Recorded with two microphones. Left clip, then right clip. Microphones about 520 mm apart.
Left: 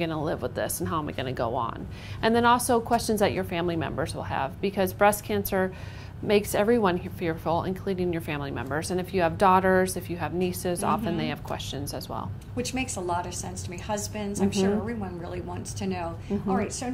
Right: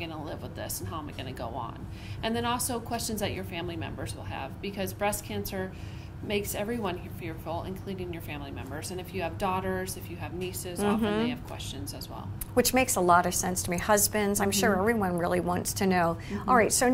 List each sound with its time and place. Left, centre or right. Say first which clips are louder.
0.0 s a woman's voice: left 9 dB; left
12.5 s a woman's voice: right 7 dB; right